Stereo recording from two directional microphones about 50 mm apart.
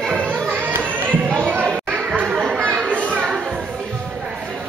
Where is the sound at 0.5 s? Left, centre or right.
Right.